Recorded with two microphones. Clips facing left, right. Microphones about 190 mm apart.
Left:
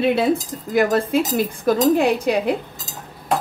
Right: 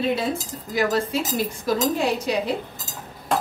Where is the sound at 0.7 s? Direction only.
55° left (ahead or behind).